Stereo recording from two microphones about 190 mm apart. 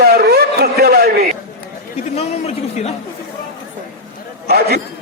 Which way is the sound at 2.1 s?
35° left (ahead or behind).